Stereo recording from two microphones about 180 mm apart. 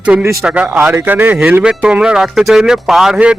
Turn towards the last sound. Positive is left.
turn(degrees=-5)  # may be behind; listen again after turning